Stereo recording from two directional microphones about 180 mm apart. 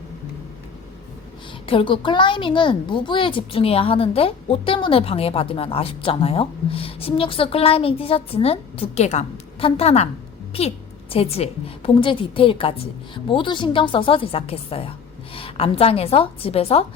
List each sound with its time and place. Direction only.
1.6 s a woman's voice: 30° left (ahead or behind)